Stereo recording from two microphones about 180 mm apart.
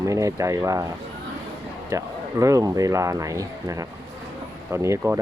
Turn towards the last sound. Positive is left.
turn(degrees=-15)  # may be behind; listen again after turning